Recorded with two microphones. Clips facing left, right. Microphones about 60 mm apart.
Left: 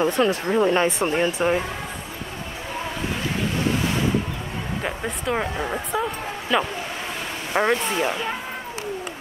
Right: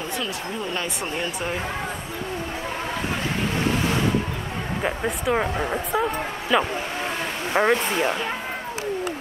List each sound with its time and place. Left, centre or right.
0.0 s speech: left
4.8 s speech: centre